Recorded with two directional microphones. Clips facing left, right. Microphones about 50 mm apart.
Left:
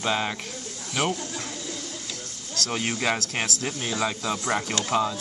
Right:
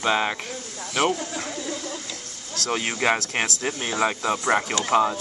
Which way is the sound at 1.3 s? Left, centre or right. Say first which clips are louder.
Right 4 dB; right.